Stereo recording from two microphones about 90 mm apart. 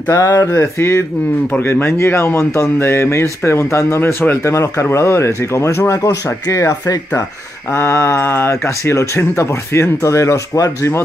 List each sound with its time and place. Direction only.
0.1 s speech: 40° left (ahead or behind)
0.5 s speech: 30° left (ahead or behind)